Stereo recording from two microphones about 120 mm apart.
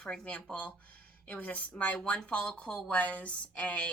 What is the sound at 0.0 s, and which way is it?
Speech, 10° left (ahead or behind).